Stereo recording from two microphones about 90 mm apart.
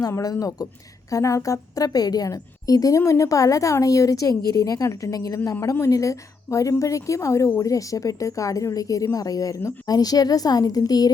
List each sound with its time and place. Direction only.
0.1 s a woman's voice: 40° left (ahead or behind)